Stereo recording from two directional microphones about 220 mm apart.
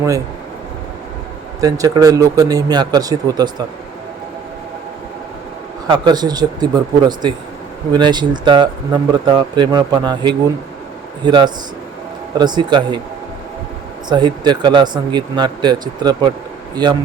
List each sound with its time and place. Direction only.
1.8 s speech: 15° right (ahead or behind)
5.9 s speech: 20° right (ahead or behind)
14.1 s speech: 20° right (ahead or behind)